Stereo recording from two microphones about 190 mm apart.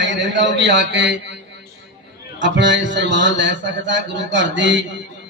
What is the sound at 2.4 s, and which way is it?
A man's voice, 70° right (ahead or behind).